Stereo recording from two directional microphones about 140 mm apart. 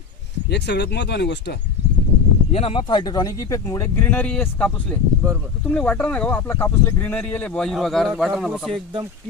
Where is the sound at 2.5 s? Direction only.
45° left (ahead or behind); by 8.8 s centre (ahead or behind).